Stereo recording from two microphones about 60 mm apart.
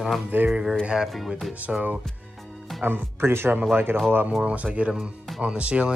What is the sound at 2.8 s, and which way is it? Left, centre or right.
Speech, right.